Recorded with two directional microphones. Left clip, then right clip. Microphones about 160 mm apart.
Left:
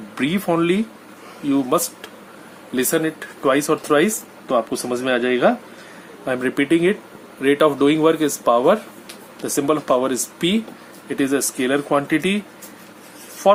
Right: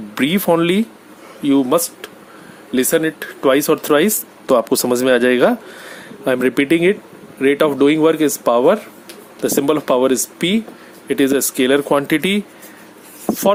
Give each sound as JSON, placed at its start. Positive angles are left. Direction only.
{"t": 0.1, "sound": "speech", "side_deg": -60}
{"t": 1.5, "sound": "speech", "side_deg": -50}
{"t": 6.2, "sound": "speech", "side_deg": -55}
{"t": 9.4, "sound": "speech", "side_deg": -60}
{"t": 11.1, "sound": "speech", "side_deg": -60}